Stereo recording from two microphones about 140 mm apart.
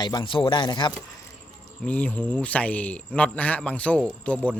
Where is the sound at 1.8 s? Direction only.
10° left (ahead or behind).